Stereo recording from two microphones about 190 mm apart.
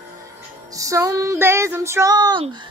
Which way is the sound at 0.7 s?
15° right (ahead or behind).